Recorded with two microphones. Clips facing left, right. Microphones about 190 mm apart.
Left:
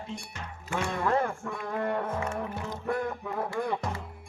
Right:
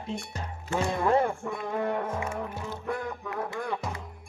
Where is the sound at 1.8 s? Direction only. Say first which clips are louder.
Even; 5° right (ahead or behind).